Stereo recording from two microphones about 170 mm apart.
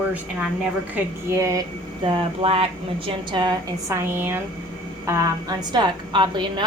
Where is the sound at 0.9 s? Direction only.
15° right (ahead or behind).